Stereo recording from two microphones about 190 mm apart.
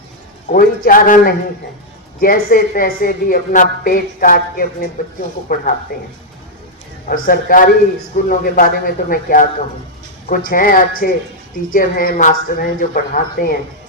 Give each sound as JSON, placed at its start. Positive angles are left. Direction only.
{"t": 0.5, "sound": "speech", "side_deg": 45}
{"t": 7.1, "sound": "speech", "side_deg": 50}